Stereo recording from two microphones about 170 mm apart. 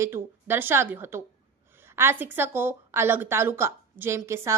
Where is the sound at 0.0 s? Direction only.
15° right (ahead or behind).